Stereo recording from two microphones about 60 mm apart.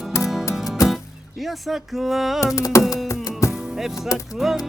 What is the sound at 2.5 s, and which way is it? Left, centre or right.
Music, left.